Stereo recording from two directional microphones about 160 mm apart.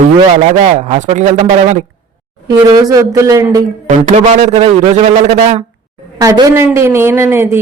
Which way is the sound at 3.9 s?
45° right (ahead or behind).